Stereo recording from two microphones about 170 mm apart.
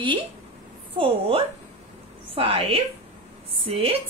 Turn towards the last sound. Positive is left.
turn(degrees=-35)  # may be behind; listen again after turning